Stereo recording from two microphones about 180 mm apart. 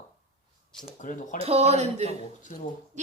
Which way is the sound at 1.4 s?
35° right (ahead or behind).